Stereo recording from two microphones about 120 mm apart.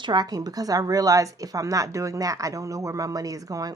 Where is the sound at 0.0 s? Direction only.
35° right (ahead or behind).